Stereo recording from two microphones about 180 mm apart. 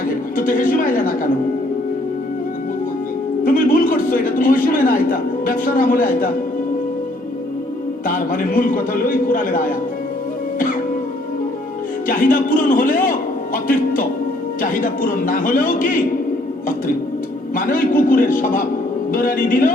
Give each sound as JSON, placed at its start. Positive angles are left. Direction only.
{"t": 0.3, "sound": "a man's voice", "side_deg": 50}
{"t": 3.4, "sound": "a man's voice", "side_deg": 50}
{"t": 8.0, "sound": "a man's voice", "side_deg": 50}
{"t": 12.0, "sound": "a man's voice", "side_deg": 50}
{"t": 17.5, "sound": "a man's voice", "side_deg": 50}